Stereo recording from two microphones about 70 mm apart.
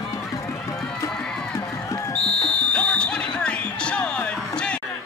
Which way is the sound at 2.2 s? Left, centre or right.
Centre.